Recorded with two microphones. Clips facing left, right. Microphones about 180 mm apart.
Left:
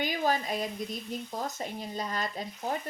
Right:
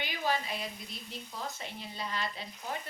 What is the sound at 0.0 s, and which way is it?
Speech, 45° left (ahead or behind).